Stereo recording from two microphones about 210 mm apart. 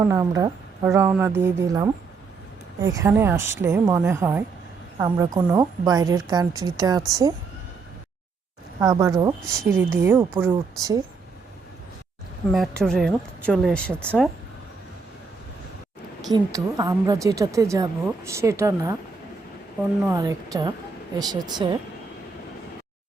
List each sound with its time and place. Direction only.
0.0 s a woman's voice: 15° right (ahead or behind)
8.8 s a woman's voice: 20° right (ahead or behind)
12.5 s speech: centre (ahead or behind)
16.3 s a woman's voice: 15° right (ahead or behind)
20.1 s a woman's voice: 15° right (ahead or behind)